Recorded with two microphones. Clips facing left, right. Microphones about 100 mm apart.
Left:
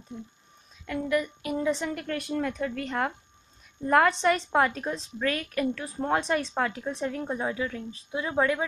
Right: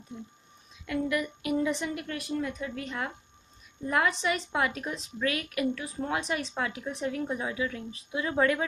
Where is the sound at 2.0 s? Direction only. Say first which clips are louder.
Left 3 dB; 50° left (ahead or behind).